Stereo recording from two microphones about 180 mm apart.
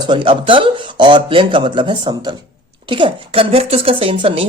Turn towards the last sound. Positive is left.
turn(degrees=-30)  # may be behind; listen again after turning